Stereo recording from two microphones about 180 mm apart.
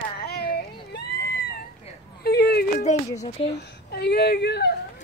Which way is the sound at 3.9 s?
65° left (ahead or behind).